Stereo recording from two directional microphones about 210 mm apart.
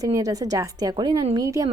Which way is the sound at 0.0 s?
15° right (ahead or behind).